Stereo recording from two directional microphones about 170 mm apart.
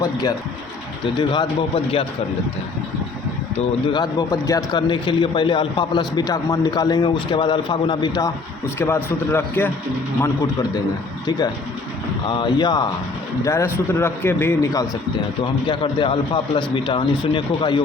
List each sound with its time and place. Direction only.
0.0 s a man's voice: 20° left (ahead or behind)
3.8 s a man's voice: 25° left (ahead or behind)
8.8 s a man's voice: 15° left (ahead or behind)
12.3 s a man's voice: 25° left (ahead or behind)